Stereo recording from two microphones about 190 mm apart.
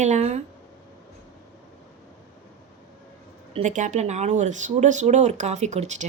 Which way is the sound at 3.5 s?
40° right (ahead or behind).